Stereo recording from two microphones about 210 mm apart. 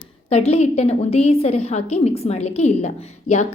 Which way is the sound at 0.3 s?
30° left (ahead or behind).